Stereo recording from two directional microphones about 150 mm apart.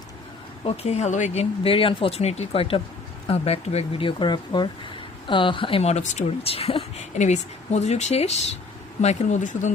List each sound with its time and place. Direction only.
0.6 s speech: 40° left (ahead or behind)